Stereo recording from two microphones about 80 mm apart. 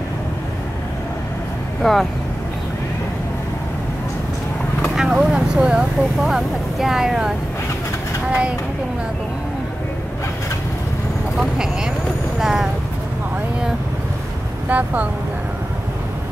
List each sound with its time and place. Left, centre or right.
1.8 s speech: centre
4.9 s speech: centre
11.3 s speech: centre
14.7 s speech: right